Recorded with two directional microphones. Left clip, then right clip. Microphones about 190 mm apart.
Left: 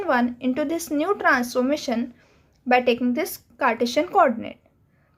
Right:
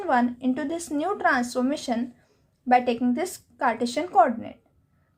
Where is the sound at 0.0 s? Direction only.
30° left (ahead or behind).